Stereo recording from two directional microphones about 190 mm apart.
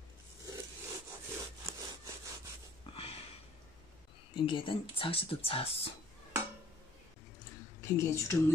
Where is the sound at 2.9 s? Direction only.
30° left (ahead or behind).